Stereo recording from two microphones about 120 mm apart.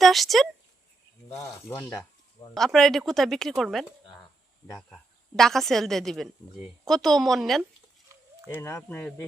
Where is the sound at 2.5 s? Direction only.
Centre (ahead or behind).